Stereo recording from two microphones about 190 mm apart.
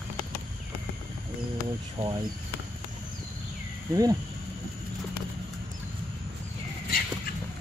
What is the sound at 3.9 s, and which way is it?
Speech, 20° right (ahead or behind).